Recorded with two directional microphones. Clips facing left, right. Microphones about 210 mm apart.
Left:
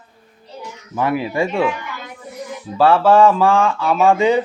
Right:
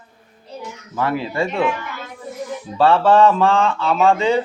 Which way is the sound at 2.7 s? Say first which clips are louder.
Left 1 dB; 5° left (ahead or behind).